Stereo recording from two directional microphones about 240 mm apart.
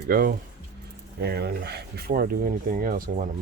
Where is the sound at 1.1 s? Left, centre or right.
Right.